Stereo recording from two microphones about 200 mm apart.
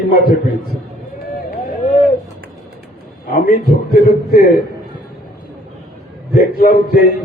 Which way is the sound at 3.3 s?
45° left (ahead or behind).